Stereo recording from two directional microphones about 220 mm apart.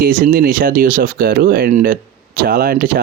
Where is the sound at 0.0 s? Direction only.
40° right (ahead or behind).